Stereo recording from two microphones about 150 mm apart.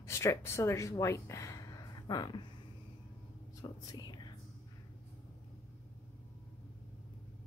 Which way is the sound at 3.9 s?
25° left (ahead or behind).